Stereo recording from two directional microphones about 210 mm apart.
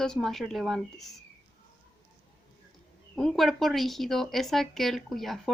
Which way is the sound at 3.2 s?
Centre (ahead or behind).